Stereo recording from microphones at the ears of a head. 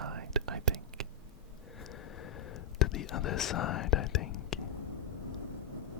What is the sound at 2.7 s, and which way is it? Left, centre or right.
Whispering, left.